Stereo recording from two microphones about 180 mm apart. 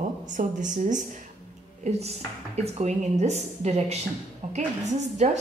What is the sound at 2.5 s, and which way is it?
Speech, 40° right (ahead or behind).